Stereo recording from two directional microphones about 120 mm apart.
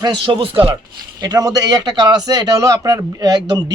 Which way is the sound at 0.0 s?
40° right (ahead or behind).